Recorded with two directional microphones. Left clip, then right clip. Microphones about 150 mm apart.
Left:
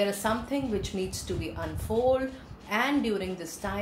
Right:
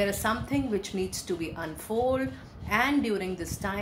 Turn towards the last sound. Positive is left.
turn(degrees=-50)  # may be behind; listen again after turning